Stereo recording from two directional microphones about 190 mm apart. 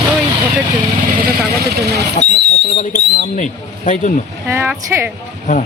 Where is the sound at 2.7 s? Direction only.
35° left (ahead or behind).